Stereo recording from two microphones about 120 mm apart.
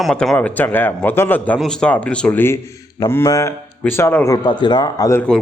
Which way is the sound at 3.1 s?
25° left (ahead or behind).